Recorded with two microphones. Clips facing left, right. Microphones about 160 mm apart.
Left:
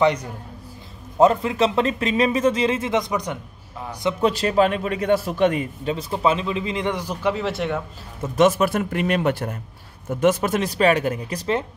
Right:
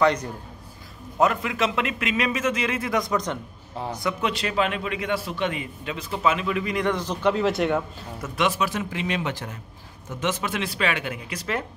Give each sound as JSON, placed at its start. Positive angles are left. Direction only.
{"t": 1.1, "sound": "a man's voice", "side_deg": 30}
{"t": 4.2, "sound": "a man's voice", "side_deg": 40}
{"t": 7.2, "sound": "speech", "side_deg": 0}
{"t": 8.4, "sound": "a man's voice", "side_deg": 45}